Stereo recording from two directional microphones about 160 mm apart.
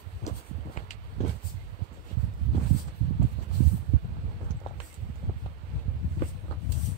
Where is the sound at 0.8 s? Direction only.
50° left (ahead or behind).